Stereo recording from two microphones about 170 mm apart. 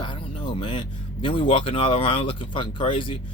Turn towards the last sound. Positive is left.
turn(degrees=30)  # may be behind; listen again after turning